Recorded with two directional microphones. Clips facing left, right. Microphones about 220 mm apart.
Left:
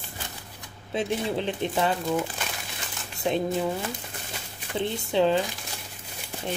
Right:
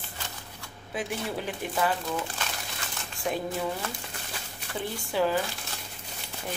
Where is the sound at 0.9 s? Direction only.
25° left (ahead or behind).